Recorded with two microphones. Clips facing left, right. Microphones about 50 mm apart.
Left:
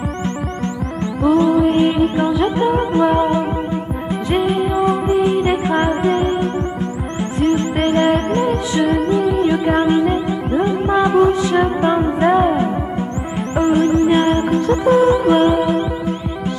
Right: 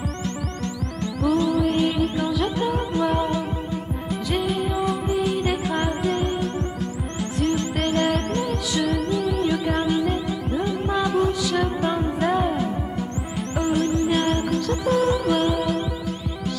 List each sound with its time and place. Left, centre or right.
1.2 s music: left